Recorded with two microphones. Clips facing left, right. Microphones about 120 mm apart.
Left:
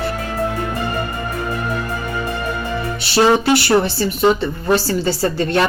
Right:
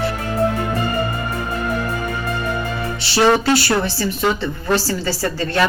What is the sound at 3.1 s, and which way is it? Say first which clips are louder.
Speech: left 1 dB; 15° left (ahead or behind).